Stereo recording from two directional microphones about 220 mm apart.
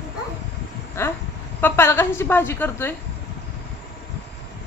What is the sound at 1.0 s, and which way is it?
A woman's voice, 10° left (ahead or behind).